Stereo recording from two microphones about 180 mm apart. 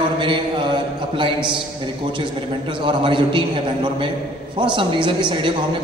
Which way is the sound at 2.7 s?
25° right (ahead or behind).